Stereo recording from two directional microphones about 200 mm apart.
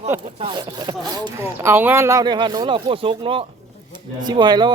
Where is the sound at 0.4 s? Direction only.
20° right (ahead or behind).